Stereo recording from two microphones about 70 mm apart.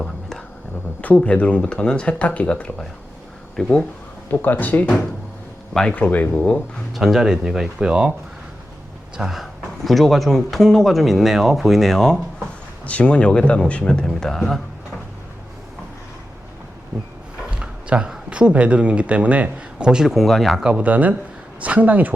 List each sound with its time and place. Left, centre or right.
0.0 s a sound: centre
1.0 s speech: centre
4.3 s speech: left
6.9 s speech: centre
7.9 s speech: centre
9.1 s speech: centre
12.8 s speech: centre
17.6 s speech: centre
20.1 s speech: centre
20.6 s speech: centre